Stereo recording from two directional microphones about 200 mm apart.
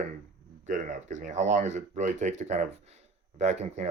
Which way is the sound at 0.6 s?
40° right (ahead or behind).